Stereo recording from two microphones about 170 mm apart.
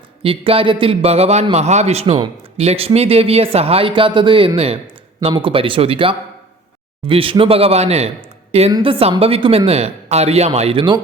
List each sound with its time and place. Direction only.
0.2 s a man's voice: 35° right (ahead or behind)